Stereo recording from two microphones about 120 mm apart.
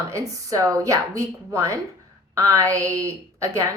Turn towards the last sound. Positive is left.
turn(degrees=-25)  # may be behind; listen again after turning